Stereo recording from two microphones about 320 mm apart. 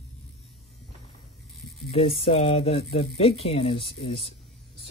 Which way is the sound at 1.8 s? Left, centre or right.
Centre.